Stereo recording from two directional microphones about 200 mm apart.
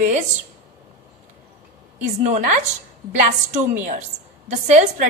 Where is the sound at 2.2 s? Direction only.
40° right (ahead or behind).